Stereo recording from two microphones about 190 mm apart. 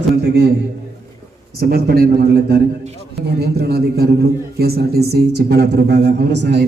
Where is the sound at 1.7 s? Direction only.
55° right (ahead or behind).